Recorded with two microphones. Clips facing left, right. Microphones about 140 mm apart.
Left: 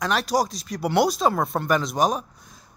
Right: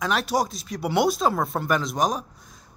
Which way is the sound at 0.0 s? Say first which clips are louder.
Left 1 dB; centre (ahead or behind).